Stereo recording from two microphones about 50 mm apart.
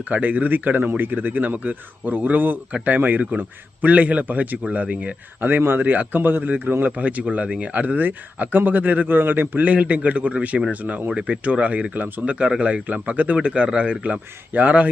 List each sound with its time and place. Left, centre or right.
0.1 s speech: right
5.4 s speech: right; by 7.6 s centre
7.6 s speech: right